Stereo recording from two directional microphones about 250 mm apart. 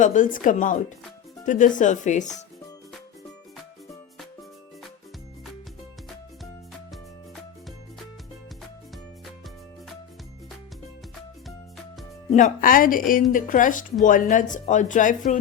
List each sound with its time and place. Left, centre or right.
0.0 s speech: left
12.3 s speech: left